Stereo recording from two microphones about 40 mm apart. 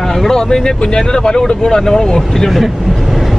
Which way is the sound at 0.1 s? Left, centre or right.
Centre.